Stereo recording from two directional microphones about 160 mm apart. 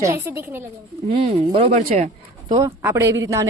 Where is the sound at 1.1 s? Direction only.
35° right (ahead or behind).